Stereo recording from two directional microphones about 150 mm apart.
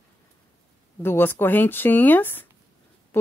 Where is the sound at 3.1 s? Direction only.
15° left (ahead or behind).